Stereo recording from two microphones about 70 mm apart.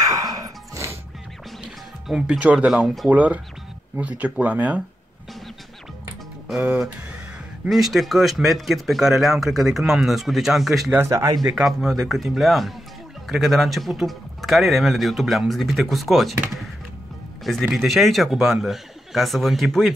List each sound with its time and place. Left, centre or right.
0.0 s music: right
2.2 s speech: centre
6.5 s speech: centre
7.6 s speech: centre
11.1 s speech: right
11.5 s speech: centre
17.4 s music: centre
17.7 s speech: centre